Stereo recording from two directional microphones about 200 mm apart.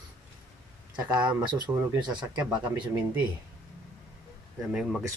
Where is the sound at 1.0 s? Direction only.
20° right (ahead or behind).